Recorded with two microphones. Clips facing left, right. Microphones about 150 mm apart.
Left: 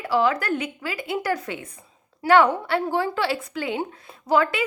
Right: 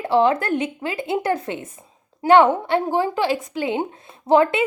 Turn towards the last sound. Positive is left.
turn(degrees=-25)  # may be behind; listen again after turning